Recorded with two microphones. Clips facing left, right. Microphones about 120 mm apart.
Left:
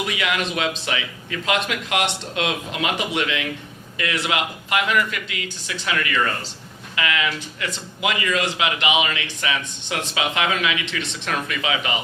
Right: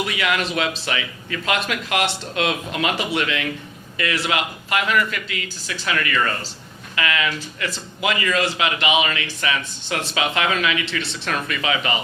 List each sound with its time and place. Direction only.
0.1 s a man's voice: 15° left (ahead or behind)